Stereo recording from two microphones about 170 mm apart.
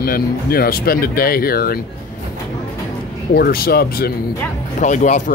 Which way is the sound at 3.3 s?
65° left (ahead or behind).